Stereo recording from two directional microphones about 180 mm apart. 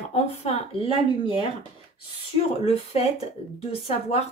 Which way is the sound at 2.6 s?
35° left (ahead or behind).